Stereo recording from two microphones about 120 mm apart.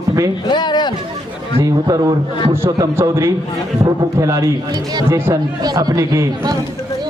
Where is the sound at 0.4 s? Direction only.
40° left (ahead or behind).